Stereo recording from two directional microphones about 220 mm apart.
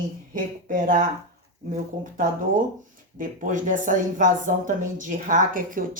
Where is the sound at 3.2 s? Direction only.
35° right (ahead or behind).